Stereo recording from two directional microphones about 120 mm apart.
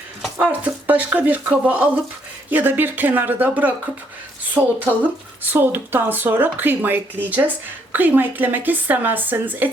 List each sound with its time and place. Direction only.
0.3 s speech: 10° right (ahead or behind)